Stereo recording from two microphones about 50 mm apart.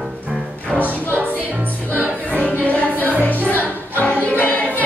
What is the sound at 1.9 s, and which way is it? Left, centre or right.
Music, right.